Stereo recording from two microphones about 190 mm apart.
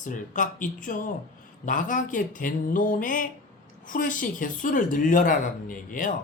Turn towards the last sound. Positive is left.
turn(degrees=45)  # may be behind; listen again after turning